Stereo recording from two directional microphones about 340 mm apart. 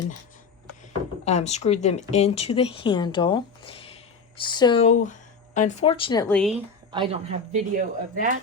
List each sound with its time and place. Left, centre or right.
1.2 s speech: centre
6.9 s speech: centre